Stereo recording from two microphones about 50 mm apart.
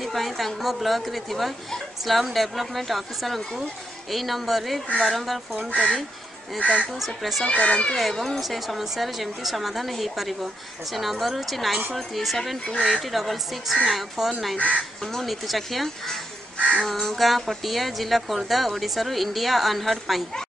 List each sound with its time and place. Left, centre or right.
0.0 s speech: centre
6.6 s speech: left
6.9 s speech: centre
7.4 s speech: left
7.9 s speech: centre
15.0 s speech: centre
16.5 s speech: left
16.8 s speech: centre